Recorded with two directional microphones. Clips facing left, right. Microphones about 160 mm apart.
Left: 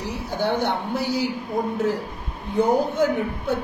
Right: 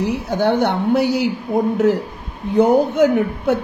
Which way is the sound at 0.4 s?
65° right (ahead or behind).